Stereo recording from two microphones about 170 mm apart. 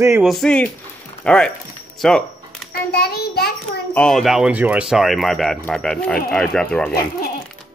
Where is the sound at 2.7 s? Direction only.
70° left (ahead or behind).